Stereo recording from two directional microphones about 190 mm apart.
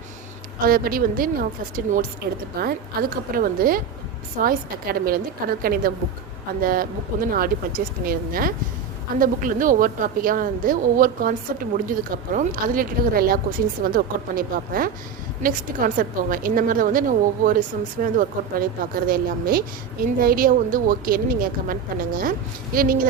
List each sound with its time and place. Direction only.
0.6 s a woman's voice: 50° right (ahead or behind)